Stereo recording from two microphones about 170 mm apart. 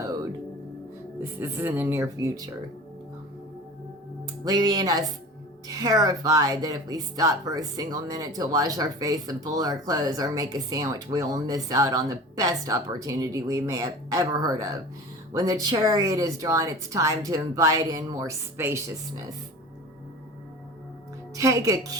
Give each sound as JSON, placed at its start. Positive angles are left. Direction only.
{"t": 1.2, "sound": "speech", "side_deg": -15}
{"t": 4.4, "sound": "speech", "side_deg": -20}
{"t": 21.3, "sound": "speech", "side_deg": -20}